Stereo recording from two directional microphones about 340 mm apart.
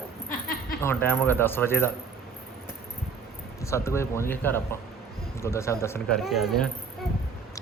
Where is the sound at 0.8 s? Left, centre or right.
Centre.